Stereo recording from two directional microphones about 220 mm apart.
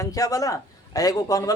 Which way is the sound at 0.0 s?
15° left (ahead or behind).